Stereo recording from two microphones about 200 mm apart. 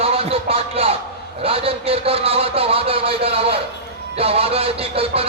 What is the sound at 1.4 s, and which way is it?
Music, 30° right (ahead or behind).